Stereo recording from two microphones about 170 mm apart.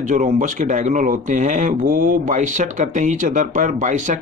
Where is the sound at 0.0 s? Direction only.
50° right (ahead or behind).